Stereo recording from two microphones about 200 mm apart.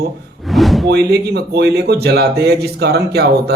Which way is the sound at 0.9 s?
55° right (ahead or behind).